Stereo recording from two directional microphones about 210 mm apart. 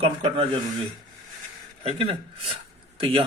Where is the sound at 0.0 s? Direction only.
25° right (ahead or behind).